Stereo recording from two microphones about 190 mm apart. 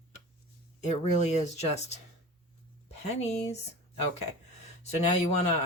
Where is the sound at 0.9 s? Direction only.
40° left (ahead or behind).